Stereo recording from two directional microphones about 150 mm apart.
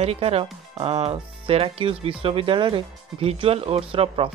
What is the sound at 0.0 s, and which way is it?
Speech, 40° right (ahead or behind).